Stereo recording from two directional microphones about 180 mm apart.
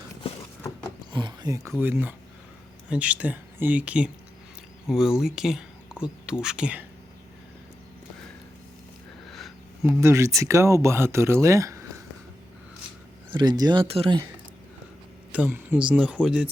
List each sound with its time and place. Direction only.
1.1 s speech: 25° right (ahead or behind); by 6.8 s 5° right (ahead or behind)
10.0 s speech: 15° right (ahead or behind)
13.3 s speech: 25° right (ahead or behind)
15.3 s speech: 10° right (ahead or behind)